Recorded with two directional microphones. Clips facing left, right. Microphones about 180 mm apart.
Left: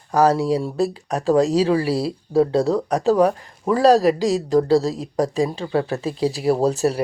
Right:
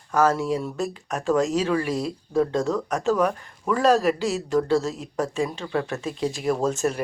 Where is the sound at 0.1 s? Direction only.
35° left (ahead or behind).